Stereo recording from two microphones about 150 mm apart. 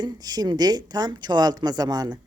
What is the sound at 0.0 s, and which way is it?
Speech, 25° right (ahead or behind).